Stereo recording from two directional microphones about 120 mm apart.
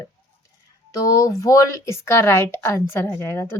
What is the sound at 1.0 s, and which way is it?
Speech, 30° left (ahead or behind).